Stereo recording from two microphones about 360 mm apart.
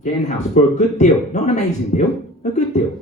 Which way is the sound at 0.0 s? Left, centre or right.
Centre.